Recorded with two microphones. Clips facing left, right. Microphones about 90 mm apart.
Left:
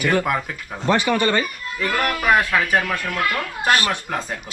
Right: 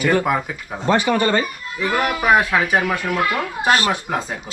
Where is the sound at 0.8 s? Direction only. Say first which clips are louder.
Right 1 dB; 25° right (ahead or behind).